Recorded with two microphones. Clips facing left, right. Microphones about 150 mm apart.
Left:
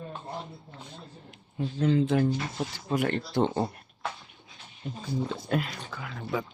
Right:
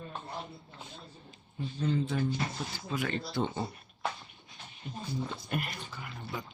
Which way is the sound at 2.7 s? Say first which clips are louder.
Left 7 dB; 65° left (ahead or behind).